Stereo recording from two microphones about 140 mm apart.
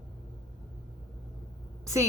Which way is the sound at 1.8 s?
20° right (ahead or behind).